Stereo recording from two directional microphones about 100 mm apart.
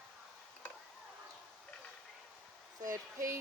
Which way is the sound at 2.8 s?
30° right (ahead or behind).